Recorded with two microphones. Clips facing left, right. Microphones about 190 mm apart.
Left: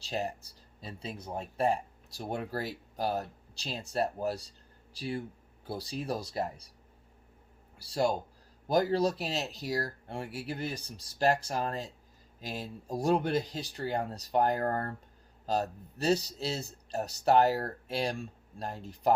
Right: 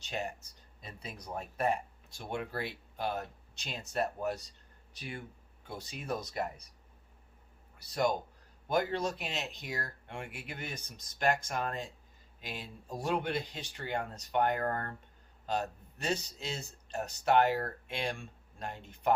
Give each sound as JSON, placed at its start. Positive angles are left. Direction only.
{"t": 0.0, "sound": "speech", "side_deg": 35}
{"t": 7.8, "sound": "speech", "side_deg": 30}